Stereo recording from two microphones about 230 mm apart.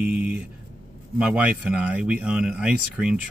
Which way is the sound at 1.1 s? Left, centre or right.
Centre.